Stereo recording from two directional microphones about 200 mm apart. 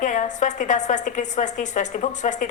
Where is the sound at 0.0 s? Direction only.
40° left (ahead or behind).